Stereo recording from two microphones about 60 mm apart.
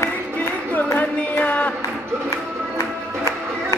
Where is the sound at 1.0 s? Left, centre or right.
Left.